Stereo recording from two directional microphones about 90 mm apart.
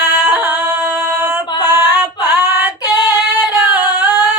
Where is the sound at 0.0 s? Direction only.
25° right (ahead or behind).